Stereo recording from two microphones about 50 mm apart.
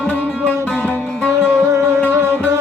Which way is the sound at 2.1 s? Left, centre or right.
Right.